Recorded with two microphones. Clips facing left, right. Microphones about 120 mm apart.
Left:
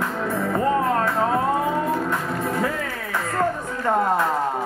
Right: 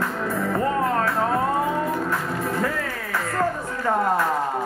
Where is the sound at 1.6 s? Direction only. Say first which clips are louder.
Left 1 dB; 20° left (ahead or behind).